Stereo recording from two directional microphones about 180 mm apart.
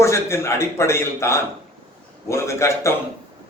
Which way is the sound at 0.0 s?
15° left (ahead or behind).